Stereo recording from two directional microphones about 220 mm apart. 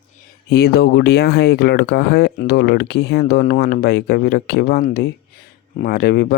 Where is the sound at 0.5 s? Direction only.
45° left (ahead or behind).